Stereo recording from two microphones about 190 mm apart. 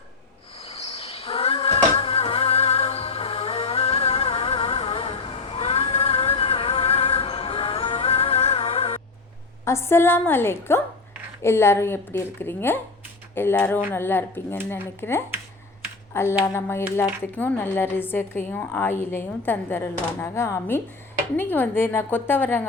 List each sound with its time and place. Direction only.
0.6 s a sound: 30° left (ahead or behind)
9.6 s a woman's voice: 15° left (ahead or behind)
16.4 s a woman's voice: 15° left (ahead or behind)